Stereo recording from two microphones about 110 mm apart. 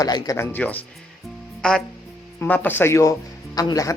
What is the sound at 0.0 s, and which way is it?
Speech, 35° left (ahead or behind).